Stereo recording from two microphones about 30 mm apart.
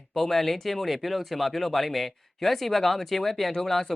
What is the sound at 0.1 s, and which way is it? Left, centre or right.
Speech, centre.